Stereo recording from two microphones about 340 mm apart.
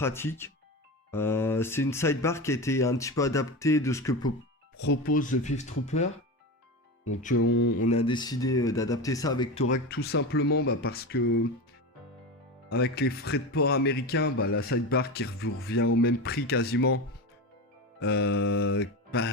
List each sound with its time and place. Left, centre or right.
0.0 s speech: centre
4.9 s speech: left
7.3 s speech: left
7.8 s speech: centre
9.7 s speech: left
12.6 s speech: left
14.6 s speech: left
18.0 s speech: left